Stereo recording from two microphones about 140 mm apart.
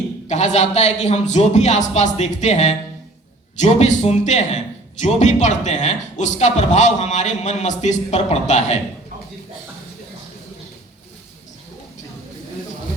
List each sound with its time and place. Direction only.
0.3 s a man's voice: 55° left (ahead or behind)